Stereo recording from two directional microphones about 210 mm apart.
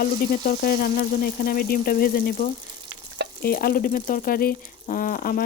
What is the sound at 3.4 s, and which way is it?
Speech, 45° left (ahead or behind).